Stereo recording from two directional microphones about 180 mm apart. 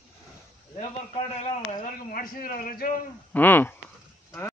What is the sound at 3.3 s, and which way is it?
Speech, 10° left (ahead or behind).